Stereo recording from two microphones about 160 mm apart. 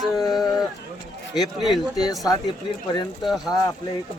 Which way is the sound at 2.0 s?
25° left (ahead or behind).